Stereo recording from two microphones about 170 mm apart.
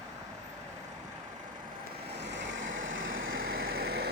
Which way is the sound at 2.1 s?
90° right.